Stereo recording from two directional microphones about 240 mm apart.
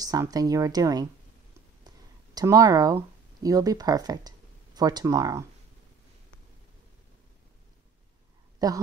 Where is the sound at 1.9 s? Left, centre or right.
Centre.